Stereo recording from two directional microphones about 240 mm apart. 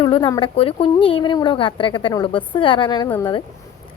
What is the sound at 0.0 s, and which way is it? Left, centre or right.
A woman's voice, centre.